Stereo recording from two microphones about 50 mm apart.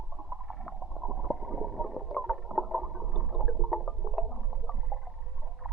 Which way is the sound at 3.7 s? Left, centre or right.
Centre.